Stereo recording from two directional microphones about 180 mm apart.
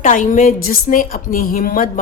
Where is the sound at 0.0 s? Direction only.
45° left (ahead or behind).